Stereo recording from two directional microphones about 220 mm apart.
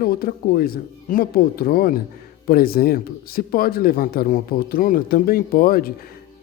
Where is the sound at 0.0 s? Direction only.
40° left (ahead or behind).